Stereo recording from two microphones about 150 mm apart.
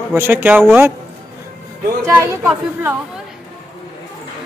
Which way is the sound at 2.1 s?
20° right (ahead or behind).